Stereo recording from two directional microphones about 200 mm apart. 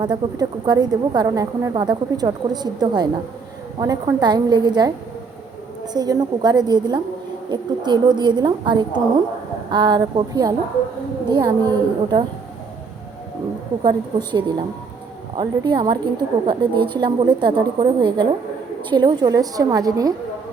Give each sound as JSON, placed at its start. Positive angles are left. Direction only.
{"t": 0.0, "sound": "a woman's voice", "side_deg": -20}
{"t": 5.9, "sound": "a woman's voice", "side_deg": -20}
{"t": 13.8, "sound": "a woman's voice", "side_deg": -20}